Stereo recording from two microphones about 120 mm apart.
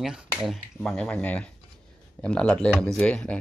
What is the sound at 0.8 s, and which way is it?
Speech, 5° left (ahead or behind).